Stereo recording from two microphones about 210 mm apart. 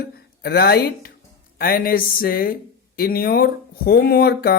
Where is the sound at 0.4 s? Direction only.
50° left (ahead or behind).